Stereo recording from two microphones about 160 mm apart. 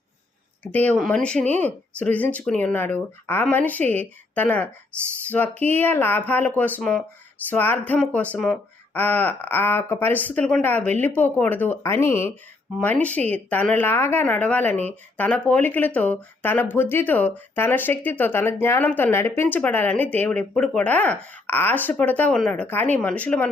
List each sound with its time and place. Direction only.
0.6 s speech: 10° left (ahead or behind)